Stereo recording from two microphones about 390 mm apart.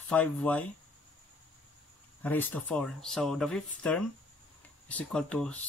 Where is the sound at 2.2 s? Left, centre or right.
Centre.